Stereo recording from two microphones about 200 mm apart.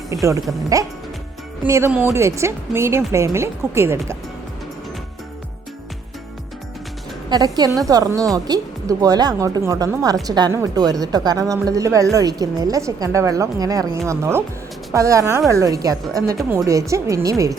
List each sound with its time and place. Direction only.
0.1 s speech: 15° right (ahead or behind)
1.6 s speech: 10° right (ahead or behind)
7.3 s a woman's voice: 20° right (ahead or behind)
16.4 s a woman's voice: centre (ahead or behind)
16.6 s speech: 15° right (ahead or behind)